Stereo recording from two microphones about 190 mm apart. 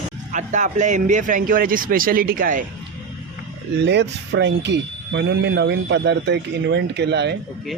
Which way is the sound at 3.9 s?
65° right (ahead or behind).